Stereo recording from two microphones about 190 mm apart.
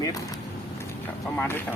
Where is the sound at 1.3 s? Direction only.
10° left (ahead or behind).